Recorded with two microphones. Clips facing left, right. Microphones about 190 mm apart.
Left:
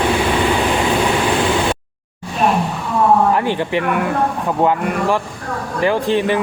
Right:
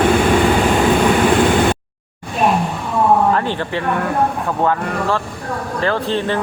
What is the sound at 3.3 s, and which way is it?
Speech, 15° left (ahead or behind).